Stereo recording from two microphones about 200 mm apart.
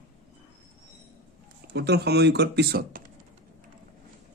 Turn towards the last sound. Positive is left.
turn(degrees=-50)  # may be behind; listen again after turning